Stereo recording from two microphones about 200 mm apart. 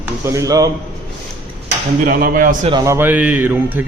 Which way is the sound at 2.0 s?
45° right (ahead or behind).